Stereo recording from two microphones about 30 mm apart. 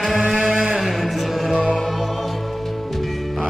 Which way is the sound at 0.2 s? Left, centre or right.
Right.